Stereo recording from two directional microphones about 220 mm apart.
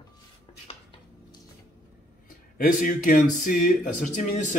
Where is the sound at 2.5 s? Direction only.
40° left (ahead or behind).